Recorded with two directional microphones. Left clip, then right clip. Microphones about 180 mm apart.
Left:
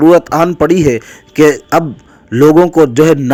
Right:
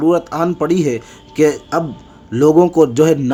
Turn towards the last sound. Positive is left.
turn(degrees=30)  # may be behind; listen again after turning